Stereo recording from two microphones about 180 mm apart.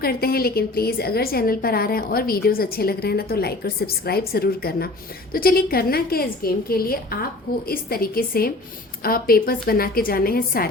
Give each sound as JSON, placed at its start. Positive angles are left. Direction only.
{"t": 0.0, "sound": "a woman's voice", "side_deg": 60}